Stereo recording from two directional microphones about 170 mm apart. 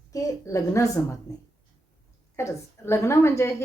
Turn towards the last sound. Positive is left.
turn(degrees=15)  # may be behind; listen again after turning